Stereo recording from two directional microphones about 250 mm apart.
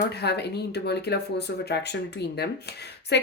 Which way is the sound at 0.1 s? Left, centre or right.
Left.